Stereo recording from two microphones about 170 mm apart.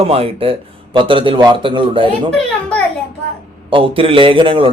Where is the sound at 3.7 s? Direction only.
30° right (ahead or behind).